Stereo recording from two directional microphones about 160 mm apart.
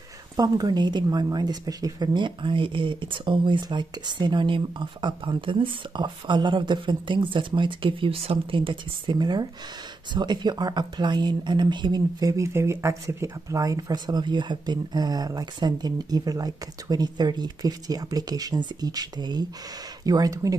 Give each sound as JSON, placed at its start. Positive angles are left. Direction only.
{"t": 0.4, "sound": "speech", "side_deg": -25}